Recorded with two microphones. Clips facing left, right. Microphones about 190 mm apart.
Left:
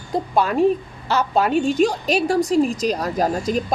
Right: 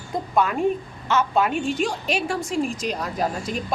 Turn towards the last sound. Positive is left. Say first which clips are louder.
# left 5 dB
turn(degrees=40)  # may be behind; listen again after turning